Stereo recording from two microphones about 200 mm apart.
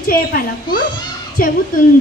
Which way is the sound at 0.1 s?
45° left (ahead or behind).